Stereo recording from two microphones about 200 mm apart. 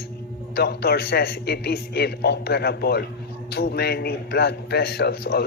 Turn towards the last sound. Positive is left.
turn(degrees=50)  # may be behind; listen again after turning